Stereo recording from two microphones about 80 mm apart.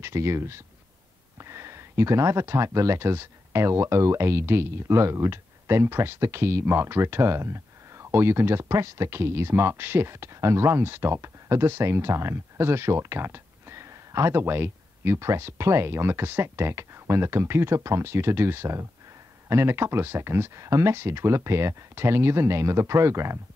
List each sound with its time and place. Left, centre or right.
0.0 s speech: right